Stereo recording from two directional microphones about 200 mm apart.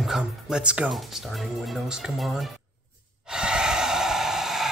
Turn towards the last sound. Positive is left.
turn(degrees=0)  # may be behind; listen again after turning